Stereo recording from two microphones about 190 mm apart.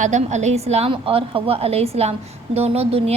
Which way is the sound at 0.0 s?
40° right (ahead or behind).